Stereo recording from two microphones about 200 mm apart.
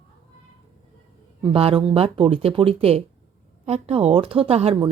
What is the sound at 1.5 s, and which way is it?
Speech, 25° right (ahead or behind).